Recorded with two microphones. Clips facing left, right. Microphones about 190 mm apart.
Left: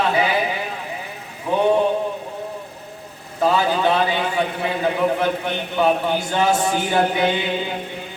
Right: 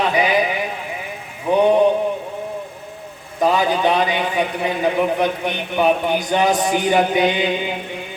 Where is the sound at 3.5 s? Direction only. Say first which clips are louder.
Right 1 dB; 15° right (ahead or behind).